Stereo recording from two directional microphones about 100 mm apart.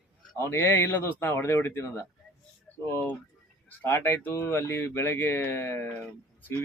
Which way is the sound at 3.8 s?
20° left (ahead or behind).